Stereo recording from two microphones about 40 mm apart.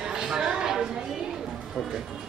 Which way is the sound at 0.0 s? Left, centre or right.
Centre.